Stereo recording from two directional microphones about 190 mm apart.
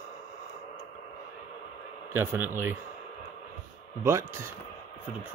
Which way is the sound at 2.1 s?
10° right (ahead or behind).